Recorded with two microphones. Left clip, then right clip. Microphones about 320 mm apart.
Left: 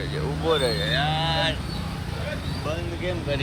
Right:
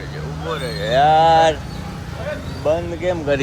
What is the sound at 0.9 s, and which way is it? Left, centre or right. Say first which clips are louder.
Mantra: right 12 dB; centre.